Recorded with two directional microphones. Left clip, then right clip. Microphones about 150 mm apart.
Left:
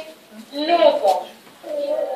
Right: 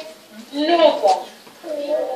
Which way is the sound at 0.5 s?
10° left (ahead or behind).